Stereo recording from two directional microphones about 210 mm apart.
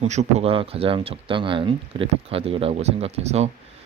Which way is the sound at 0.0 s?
30° right (ahead or behind).